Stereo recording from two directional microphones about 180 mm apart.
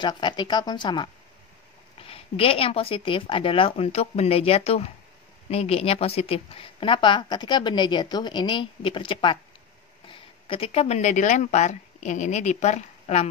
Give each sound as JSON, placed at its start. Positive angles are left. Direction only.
{"t": 0.0, "sound": "a woman's voice", "side_deg": 25}